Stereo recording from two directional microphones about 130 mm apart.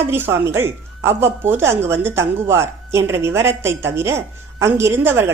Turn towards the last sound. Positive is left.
turn(degrees=-20)  # may be behind; listen again after turning